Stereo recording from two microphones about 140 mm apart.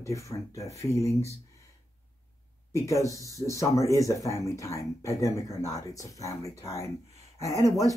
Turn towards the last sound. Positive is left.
turn(degrees=25)  # may be behind; listen again after turning